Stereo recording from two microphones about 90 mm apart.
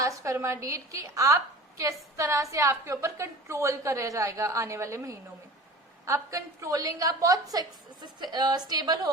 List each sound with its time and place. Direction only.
0.2 s a woman's voice: 35° right (ahead or behind)